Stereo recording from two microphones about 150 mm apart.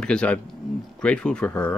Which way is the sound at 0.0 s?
5° left (ahead or behind).